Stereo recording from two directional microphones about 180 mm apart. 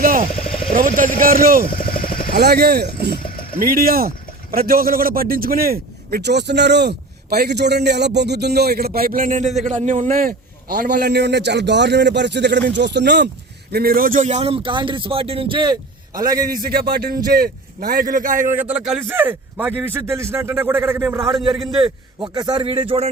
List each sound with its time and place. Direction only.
0.0 s vehicle: 50° right (ahead or behind)
0.3 s vehicle: 55° left (ahead or behind)
0.7 s a man's voice: 50° right (ahead or behind)
1.7 s vehicle: 50° left (ahead or behind)
2.3 s speech: 60° right (ahead or behind)
3.2 s vehicle: 50° left (ahead or behind)
3.6 s a man's voice: 55° right (ahead or behind); by 16.5 s 20° right (ahead or behind)
16.5 s a man's voice: 55° right (ahead or behind)
18.5 s a man's voice: 10° right (ahead or behind)
21.8 s a man's voice: 25° right (ahead or behind)